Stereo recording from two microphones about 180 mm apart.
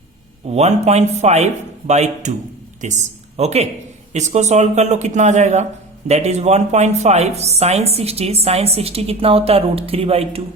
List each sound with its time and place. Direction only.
0.4 s speech: 35° right (ahead or behind)